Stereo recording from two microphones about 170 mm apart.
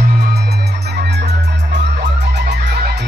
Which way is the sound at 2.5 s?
80° right.